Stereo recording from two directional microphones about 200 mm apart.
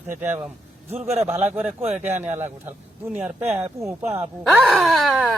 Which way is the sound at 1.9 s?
5° right (ahead or behind).